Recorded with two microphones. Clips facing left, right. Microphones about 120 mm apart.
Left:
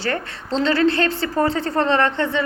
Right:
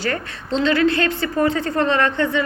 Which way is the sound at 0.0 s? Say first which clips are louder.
Even; 25° left (ahead or behind).